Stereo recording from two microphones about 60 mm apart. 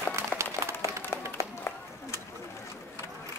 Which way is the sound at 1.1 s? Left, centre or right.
Left.